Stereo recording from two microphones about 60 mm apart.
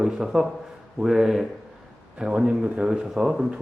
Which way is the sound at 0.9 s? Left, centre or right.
Centre.